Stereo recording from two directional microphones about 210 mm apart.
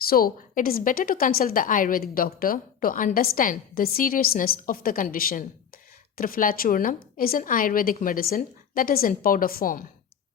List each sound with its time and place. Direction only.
0.0 s a woman's voice: 45° left (ahead or behind)